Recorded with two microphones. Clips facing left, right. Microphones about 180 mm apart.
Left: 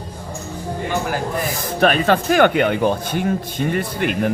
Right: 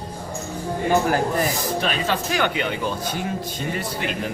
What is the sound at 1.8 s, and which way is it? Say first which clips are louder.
Speech: left 12 dB; 55° left (ahead or behind).